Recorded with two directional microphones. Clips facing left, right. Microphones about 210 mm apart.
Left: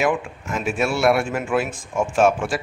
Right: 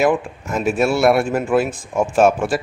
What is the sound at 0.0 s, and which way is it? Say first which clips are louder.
Speech: right 4 dB; 40° right (ahead or behind).